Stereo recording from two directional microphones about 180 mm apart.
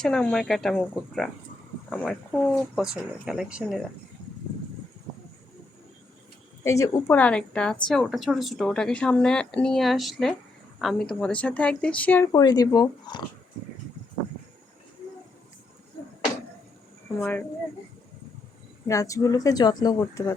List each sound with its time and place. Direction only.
0.0 s a woman's voice: 5° left (ahead or behind)
6.7 s speech: 20° left (ahead or behind)
7.2 s a woman's voice: 5° left (ahead or behind)
12.3 s speech: 20° left (ahead or behind)
17.2 s speech: 10° left (ahead or behind)
18.9 s speech: 15° left (ahead or behind)